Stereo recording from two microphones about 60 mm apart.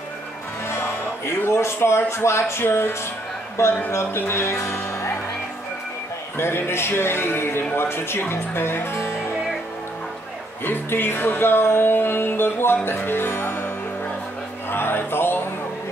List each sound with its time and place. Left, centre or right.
0.7 s music: left
4.2 s speech: left
6.3 s music: left
10.6 s music: left
12.8 s speech: left
14.7 s music: left